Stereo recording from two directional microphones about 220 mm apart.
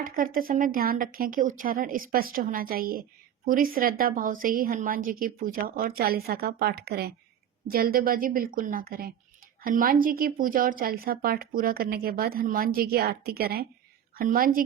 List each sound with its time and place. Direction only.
0.0 s speech: 40° right (ahead or behind)